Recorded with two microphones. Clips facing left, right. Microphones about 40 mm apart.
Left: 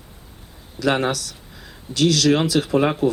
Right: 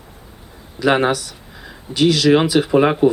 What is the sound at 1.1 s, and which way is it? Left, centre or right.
Speech, right.